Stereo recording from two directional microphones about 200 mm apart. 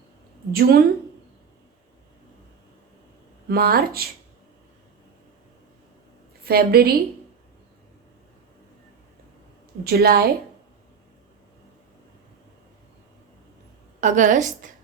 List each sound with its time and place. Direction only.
0.5 s speech: 50° right (ahead or behind)
3.5 s speech: 50° right (ahead or behind)
6.4 s a woman's voice: 50° right (ahead or behind)
9.8 s speech: 50° right (ahead or behind)
14.0 s a woman's voice: 40° right (ahead or behind)